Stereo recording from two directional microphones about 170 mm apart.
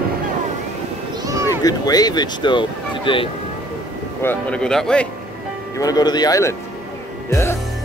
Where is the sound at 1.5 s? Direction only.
20° left (ahead or behind).